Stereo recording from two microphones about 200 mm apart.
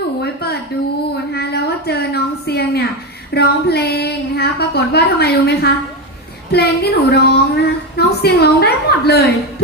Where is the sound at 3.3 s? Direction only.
55° left (ahead or behind).